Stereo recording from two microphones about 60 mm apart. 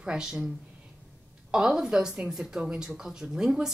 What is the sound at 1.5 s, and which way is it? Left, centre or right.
Speech, centre.